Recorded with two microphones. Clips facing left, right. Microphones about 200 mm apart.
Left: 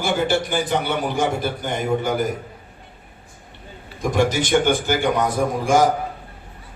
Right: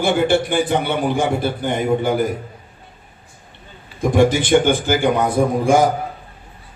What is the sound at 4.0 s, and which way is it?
A man's voice, 50° right (ahead or behind).